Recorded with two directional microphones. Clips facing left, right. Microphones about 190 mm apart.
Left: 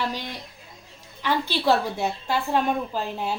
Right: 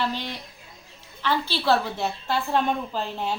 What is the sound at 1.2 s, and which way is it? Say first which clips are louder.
A woman's voice: left 1 dB; 15° left (ahead or behind).